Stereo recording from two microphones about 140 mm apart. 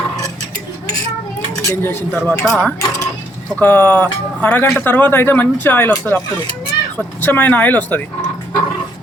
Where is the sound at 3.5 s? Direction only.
10° left (ahead or behind).